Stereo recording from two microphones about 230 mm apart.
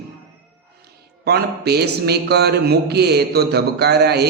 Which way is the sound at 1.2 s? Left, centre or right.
Right.